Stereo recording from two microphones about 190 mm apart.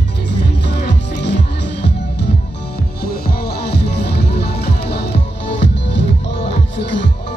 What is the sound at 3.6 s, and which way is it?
Music, 60° left (ahead or behind).